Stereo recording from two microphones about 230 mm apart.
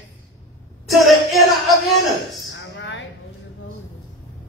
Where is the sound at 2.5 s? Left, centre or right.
Left.